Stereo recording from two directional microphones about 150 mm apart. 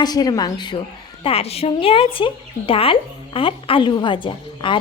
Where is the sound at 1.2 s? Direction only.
40° left (ahead or behind).